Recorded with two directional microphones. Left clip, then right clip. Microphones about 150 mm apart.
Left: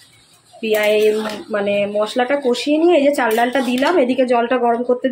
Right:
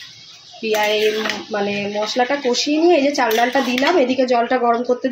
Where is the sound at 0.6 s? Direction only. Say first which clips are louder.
Left 2 dB; 10° left (ahead or behind).